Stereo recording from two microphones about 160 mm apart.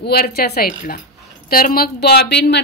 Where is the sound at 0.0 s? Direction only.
80° left.